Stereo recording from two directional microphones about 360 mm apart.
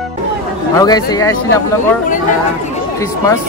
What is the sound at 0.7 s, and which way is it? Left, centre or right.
Speech, centre.